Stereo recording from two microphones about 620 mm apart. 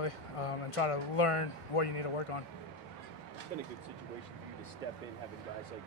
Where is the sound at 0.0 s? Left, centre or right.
Left.